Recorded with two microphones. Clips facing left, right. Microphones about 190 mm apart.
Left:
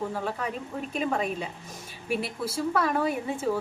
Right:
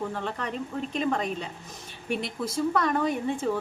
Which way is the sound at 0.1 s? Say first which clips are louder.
Left 1 dB; 5° left (ahead or behind).